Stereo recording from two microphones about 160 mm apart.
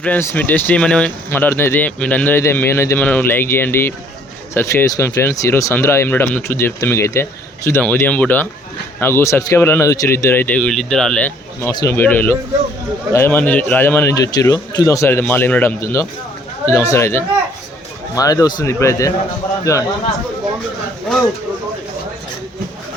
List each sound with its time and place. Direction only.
0.0 s speech: 15° left (ahead or behind)
11.6 s a man's voice: 20° left (ahead or behind)